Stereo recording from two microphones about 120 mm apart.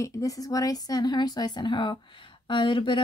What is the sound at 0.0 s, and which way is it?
Speech, 25° left (ahead or behind).